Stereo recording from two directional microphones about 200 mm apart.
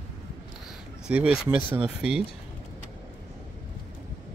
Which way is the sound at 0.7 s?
5° right (ahead or behind).